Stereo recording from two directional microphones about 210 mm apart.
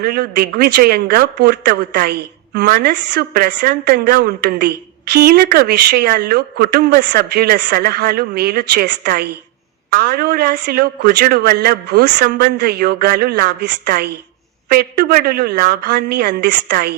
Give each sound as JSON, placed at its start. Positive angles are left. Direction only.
{"t": 0.0, "sound": "a man's voice", "side_deg": -45}